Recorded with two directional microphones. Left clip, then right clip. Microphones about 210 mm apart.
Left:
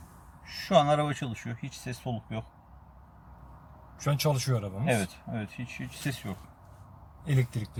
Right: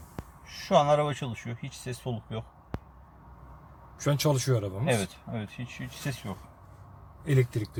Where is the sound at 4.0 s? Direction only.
25° right (ahead or behind).